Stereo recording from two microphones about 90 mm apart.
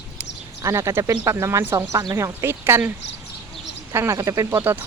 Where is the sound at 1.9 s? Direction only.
40° right (ahead or behind); by 2.9 s 25° right (ahead or behind).